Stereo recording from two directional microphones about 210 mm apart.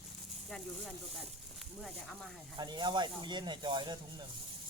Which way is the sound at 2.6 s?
20° right (ahead or behind).